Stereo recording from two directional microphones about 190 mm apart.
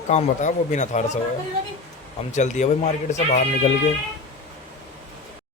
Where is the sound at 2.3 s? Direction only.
40° left (ahead or behind).